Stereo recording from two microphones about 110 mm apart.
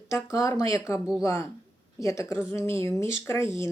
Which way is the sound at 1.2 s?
25° left (ahead or behind).